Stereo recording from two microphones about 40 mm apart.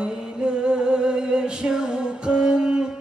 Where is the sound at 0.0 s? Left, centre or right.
Right.